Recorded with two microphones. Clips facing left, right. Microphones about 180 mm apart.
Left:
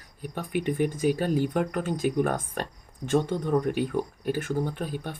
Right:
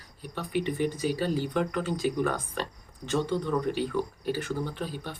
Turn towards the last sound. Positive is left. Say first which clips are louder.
# left 3 dB
turn(degrees=50)  # may be behind; listen again after turning